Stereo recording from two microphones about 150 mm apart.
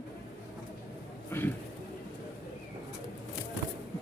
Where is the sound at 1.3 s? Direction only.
15° left (ahead or behind).